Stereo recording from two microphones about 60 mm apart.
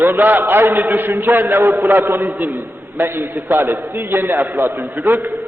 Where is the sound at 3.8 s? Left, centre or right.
Right.